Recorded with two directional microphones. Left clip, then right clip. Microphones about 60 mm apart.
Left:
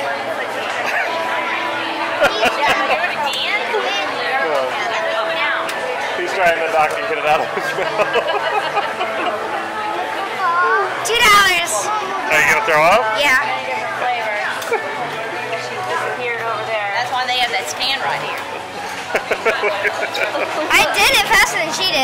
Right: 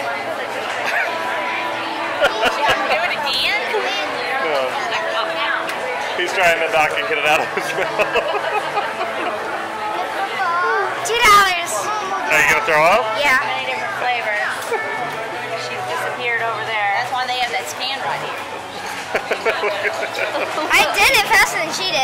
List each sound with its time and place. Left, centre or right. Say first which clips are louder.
6.3 s a man's voice: even; right
11.1 s a sound: even; left
12.3 s a man's voice: left 1 dB; centre
19.1 s a woman's voice: left 2 dB; centre